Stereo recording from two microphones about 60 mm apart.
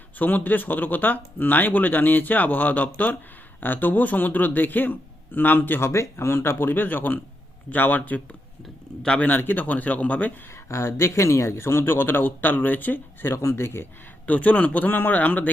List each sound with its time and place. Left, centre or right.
0.2 s speech: left
5.9 s a man's voice: left
10.7 s a man's voice: left
13.3 s a man's voice: left
14.3 s a man's voice: left